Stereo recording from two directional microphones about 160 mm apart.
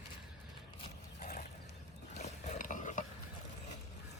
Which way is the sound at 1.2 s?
55° left (ahead or behind).